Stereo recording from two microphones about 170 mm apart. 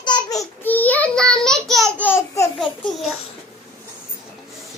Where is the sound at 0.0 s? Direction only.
25° left (ahead or behind).